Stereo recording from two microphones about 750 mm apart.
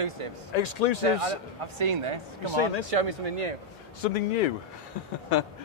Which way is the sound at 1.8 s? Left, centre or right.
Right.